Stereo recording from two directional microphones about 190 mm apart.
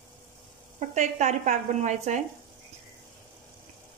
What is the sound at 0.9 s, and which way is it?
A woman's voice, 40° right (ahead or behind).